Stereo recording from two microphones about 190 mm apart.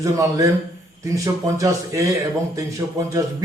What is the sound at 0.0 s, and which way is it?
Speech, 15° right (ahead or behind).